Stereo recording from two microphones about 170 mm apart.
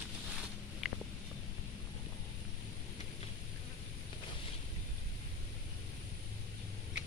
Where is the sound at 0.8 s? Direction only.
Centre (ahead or behind).